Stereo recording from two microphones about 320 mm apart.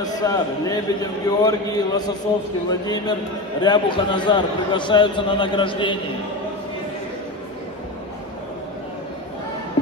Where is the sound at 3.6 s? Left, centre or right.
Centre.